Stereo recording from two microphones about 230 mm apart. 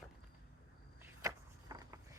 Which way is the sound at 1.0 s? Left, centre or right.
Centre.